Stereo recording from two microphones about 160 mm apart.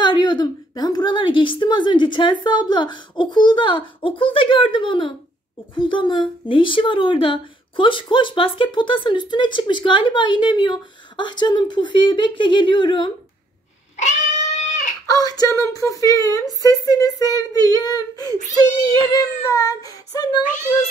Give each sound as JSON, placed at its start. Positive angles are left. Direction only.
{"t": 0.0, "sound": "a woman's voice", "side_deg": 30}
{"t": 14.7, "sound": "a sound", "side_deg": 50}
{"t": 15.0, "sound": "speech", "side_deg": 25}